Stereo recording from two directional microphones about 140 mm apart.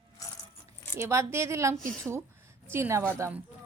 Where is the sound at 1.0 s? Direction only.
20° right (ahead or behind).